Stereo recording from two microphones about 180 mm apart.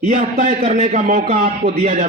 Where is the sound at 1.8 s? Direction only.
35° right (ahead or behind).